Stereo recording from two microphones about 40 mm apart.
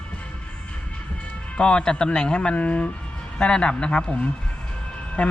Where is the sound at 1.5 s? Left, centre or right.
Left.